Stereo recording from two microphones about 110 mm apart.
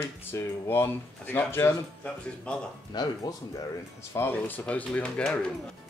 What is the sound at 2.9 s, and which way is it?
Speech, 40° left (ahead or behind).